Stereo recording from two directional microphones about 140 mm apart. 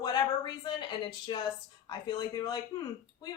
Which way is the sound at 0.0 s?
30° left (ahead or behind).